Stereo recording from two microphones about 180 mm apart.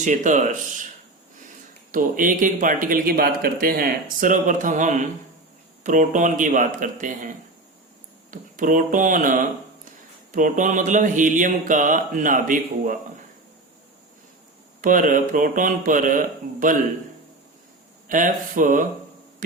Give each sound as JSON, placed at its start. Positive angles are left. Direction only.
{"t": 0.0, "sound": "speech", "side_deg": -45}
{"t": 1.9, "sound": "speech", "side_deg": -50}
{"t": 14.8, "sound": "speech", "side_deg": -50}
{"t": 18.1, "sound": "speech", "side_deg": -45}